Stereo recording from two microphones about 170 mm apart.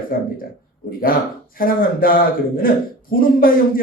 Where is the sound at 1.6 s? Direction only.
60° left (ahead or behind).